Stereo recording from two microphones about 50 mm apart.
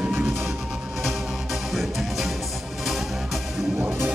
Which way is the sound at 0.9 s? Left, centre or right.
Centre.